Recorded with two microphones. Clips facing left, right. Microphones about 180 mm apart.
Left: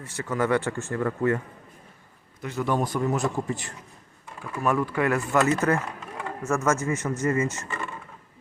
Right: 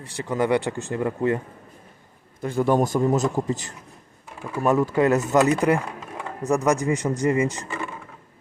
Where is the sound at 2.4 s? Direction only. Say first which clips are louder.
Right 6 dB; 30° right (ahead or behind).